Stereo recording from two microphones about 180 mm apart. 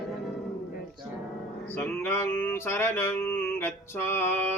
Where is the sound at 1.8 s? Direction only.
15° left (ahead or behind).